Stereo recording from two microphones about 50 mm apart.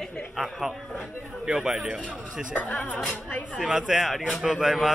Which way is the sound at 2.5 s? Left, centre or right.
Left.